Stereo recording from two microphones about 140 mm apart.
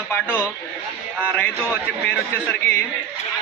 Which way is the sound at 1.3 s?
10° left (ahead or behind).